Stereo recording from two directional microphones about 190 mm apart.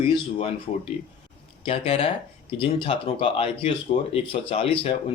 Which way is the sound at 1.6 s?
30° left (ahead or behind).